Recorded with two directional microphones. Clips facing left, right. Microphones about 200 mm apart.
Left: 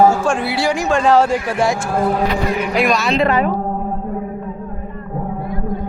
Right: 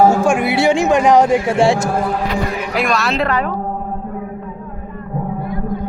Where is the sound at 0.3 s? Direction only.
15° right (ahead or behind).